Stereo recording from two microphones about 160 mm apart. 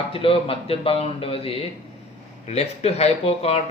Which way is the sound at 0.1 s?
35° left (ahead or behind).